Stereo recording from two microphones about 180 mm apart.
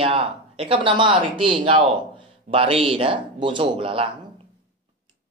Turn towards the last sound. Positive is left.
turn(degrees=-30)  # may be behind; listen again after turning